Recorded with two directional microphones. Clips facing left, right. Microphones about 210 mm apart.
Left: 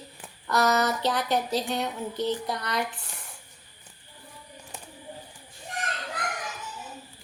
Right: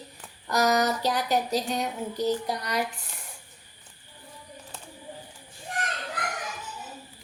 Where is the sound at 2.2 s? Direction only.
40° right (ahead or behind).